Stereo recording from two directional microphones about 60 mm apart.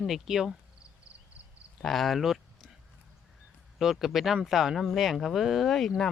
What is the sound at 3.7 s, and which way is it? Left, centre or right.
Speech, centre.